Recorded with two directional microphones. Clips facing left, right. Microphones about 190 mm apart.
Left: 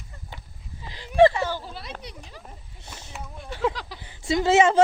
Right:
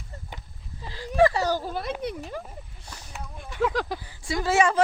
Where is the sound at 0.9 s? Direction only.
25° left (ahead or behind).